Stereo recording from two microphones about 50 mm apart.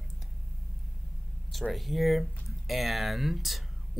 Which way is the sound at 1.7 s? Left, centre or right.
Centre.